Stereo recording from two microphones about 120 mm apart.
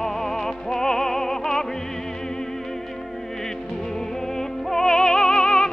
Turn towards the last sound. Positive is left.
turn(degrees=5)  # may be behind; listen again after turning